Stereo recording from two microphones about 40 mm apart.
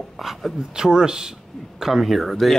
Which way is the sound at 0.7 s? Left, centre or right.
Centre.